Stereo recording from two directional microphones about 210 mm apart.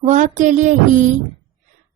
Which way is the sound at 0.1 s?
35° right (ahead or behind).